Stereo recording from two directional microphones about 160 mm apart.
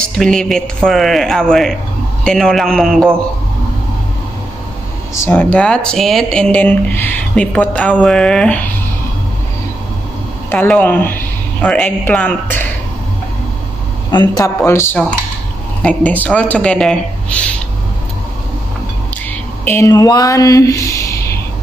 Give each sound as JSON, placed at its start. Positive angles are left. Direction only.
{"t": 0.0, "sound": "speech", "side_deg": 5}
{"t": 5.1, "sound": "speech", "side_deg": 15}
{"t": 10.5, "sound": "speech", "side_deg": 10}
{"t": 14.1, "sound": "speech", "side_deg": 25}
{"t": 19.6, "sound": "speech", "side_deg": 15}